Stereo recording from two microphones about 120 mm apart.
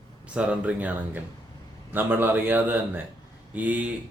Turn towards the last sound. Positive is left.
turn(degrees=-15)  # may be behind; listen again after turning